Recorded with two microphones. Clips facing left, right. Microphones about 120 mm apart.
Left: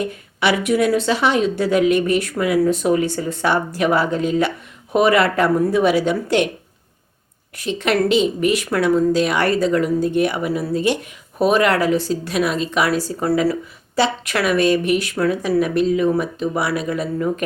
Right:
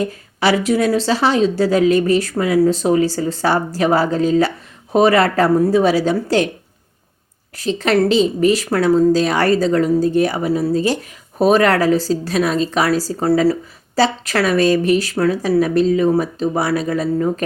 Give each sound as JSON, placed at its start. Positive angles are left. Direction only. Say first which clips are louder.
{"t": 0.0, "sound": "a woman's voice", "louder": "right 2 dB", "side_deg": -35}
{"t": 7.5, "sound": "a woman's voice", "louder": "right 3 dB", "side_deg": -35}